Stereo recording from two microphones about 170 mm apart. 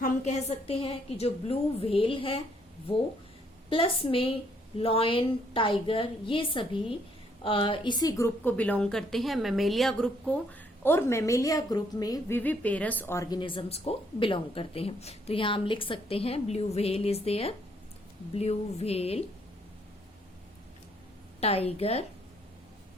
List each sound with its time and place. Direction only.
0.0 s speech: 40° left (ahead or behind)
3.7 s a woman's voice: 30° left (ahead or behind); by 10.3 s centre (ahead or behind)
10.8 s a woman's voice: 15° left (ahead or behind)
12.4 s a woman's voice: 10° left (ahead or behind)
13.4 s speech: 30° left (ahead or behind)
21.4 s speech: 35° left (ahead or behind)